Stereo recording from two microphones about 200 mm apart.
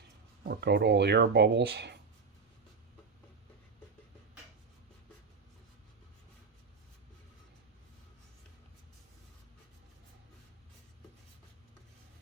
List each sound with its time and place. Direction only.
0.4 s speech: 55° right (ahead or behind)